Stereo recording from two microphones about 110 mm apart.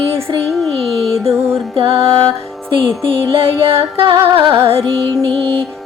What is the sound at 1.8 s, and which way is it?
Music, 60° right (ahead or behind).